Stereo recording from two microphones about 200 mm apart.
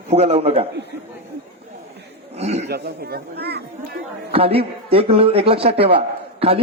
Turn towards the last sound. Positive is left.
turn(degrees=-30)  # may be behind; listen again after turning